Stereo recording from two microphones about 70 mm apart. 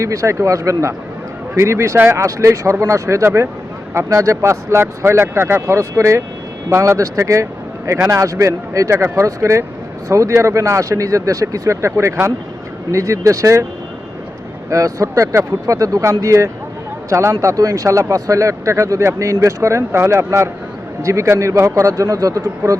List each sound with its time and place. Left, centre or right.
0.0 s speech: right
14.7 s speech: right